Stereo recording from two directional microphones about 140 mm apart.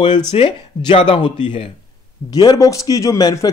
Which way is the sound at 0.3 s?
35° left (ahead or behind).